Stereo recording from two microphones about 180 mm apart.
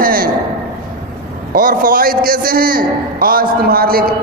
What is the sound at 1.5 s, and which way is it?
A man's voice, 50° right (ahead or behind).